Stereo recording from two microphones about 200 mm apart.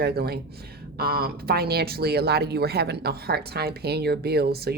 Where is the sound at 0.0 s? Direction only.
50° right (ahead or behind).